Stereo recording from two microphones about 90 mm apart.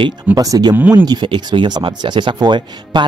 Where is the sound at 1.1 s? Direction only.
60° right (ahead or behind).